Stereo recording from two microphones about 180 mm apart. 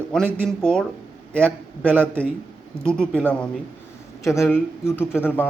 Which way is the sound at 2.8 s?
5° left (ahead or behind).